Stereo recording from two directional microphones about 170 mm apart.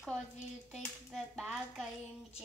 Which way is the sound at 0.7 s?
Centre (ahead or behind).